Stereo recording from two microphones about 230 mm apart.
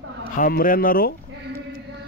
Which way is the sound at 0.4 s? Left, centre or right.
Left.